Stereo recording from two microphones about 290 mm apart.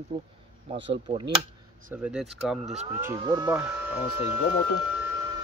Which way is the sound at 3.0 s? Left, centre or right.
Centre.